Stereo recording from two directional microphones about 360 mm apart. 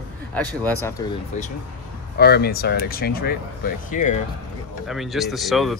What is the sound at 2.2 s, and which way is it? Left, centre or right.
Speech, left.